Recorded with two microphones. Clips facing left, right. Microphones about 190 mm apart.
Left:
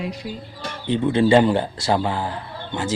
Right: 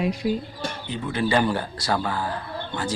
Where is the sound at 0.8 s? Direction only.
30° left (ahead or behind).